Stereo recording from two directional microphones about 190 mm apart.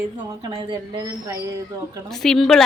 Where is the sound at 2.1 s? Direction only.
Centre (ahead or behind).